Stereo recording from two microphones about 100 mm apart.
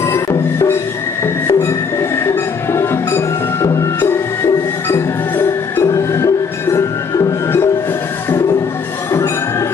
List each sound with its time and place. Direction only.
0.0 s music: 30° left (ahead or behind)